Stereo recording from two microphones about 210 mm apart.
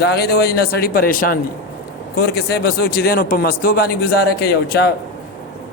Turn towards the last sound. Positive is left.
turn(degrees=50)  # may be behind; listen again after turning